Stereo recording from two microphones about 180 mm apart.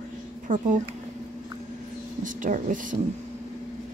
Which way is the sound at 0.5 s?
45° right (ahead or behind).